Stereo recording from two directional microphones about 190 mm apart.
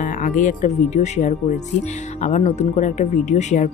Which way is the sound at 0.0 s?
45° left (ahead or behind).